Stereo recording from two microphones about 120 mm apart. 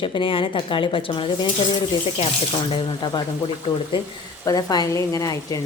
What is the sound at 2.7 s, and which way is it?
Speech, 40° left (ahead or behind).